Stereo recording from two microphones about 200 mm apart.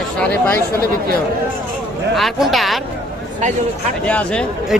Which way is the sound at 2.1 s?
Centre (ahead or behind).